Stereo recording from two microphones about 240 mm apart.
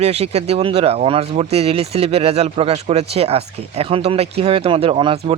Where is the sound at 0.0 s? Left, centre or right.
Right.